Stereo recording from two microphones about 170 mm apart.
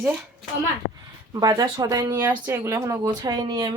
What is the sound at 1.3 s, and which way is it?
Speech, 20° right (ahead or behind).